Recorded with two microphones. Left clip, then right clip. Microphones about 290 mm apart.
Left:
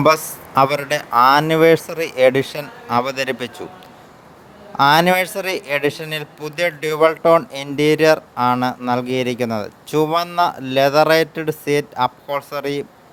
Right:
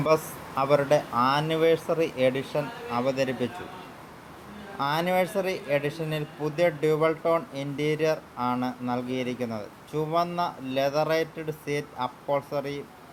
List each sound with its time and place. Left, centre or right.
0.5 s speech: left
4.8 s speech: left